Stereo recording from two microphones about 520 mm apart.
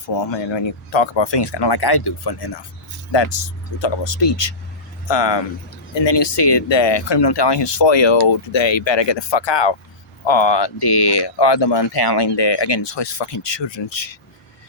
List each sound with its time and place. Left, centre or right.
0.2 s speech: left
3.8 s speech: left